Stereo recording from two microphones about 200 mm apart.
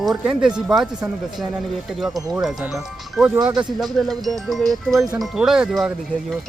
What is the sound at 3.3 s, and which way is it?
Speech, 20° right (ahead or behind).